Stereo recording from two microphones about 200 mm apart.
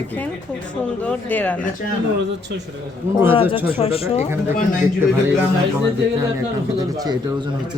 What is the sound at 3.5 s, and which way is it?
Speech, 10° right (ahead or behind).